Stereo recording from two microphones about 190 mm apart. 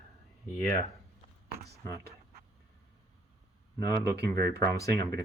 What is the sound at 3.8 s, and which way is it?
Speech, 15° left (ahead or behind).